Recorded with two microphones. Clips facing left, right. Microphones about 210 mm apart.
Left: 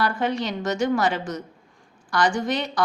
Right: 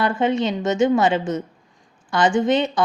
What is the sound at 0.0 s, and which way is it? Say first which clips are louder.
A woman's voice: right 5 dB; 25° right (ahead or behind).